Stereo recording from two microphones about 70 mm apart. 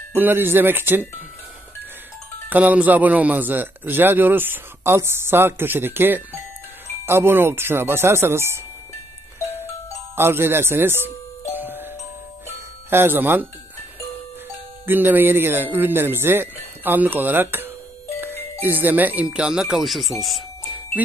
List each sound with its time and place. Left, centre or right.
0.2 s speech: right
2.5 s a man's voice: right
10.1 s speech: right
11.5 s music: right
12.9 s speech: right
14.9 s a man's voice: right; by 20.4 s centre